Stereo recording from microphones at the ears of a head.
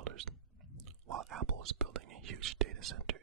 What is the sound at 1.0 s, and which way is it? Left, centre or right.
Whispering, right.